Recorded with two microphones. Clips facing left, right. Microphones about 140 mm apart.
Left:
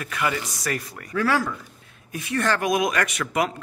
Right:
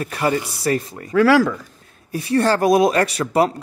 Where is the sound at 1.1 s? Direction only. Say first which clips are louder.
Right 9 dB; 90° right.